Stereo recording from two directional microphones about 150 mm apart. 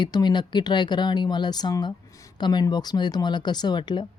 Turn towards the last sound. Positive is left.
turn(degrees=30)  # may be behind; listen again after turning